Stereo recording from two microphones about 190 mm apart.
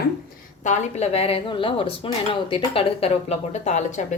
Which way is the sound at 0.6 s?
40° left (ahead or behind).